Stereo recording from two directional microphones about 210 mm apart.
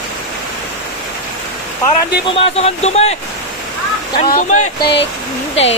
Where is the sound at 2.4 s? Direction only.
30° left (ahead or behind).